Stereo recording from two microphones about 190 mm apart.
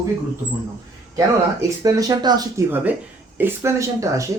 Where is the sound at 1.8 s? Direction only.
20° right (ahead or behind).